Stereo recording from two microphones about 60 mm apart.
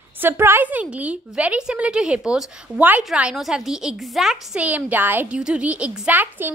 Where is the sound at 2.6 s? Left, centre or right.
Right.